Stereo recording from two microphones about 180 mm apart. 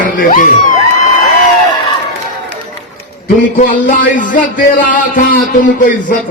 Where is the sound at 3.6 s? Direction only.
45° left (ahead or behind).